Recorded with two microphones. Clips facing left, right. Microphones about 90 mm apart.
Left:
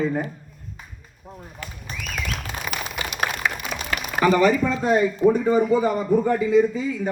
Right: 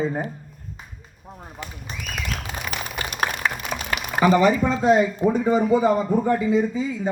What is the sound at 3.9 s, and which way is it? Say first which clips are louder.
A man's voice: right 1 dB; 20° right (ahead or behind).